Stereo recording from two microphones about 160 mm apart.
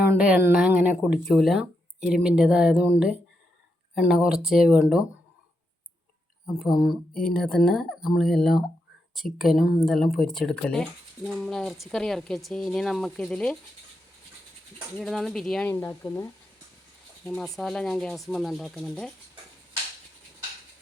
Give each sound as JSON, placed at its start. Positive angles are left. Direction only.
{"t": 0.1, "sound": "speech", "side_deg": -10}
{"t": 3.9, "sound": "speech", "side_deg": -5}
{"t": 6.5, "sound": "speech", "side_deg": 0}
{"t": 14.9, "sound": "speech", "side_deg": 0}
{"t": 15.7, "sound": "speech", "side_deg": 15}
{"t": 17.2, "sound": "speech", "side_deg": 5}